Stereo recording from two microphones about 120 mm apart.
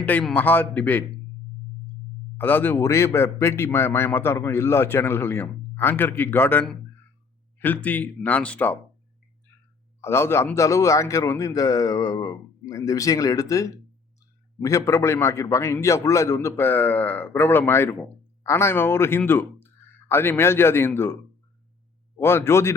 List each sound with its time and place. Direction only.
0.0 s a man's voice: 15° left (ahead or behind)
2.4 s a man's voice: 15° left (ahead or behind)
10.0 s a man's voice: 20° left (ahead or behind)
22.2 s a man's voice: 20° left (ahead or behind)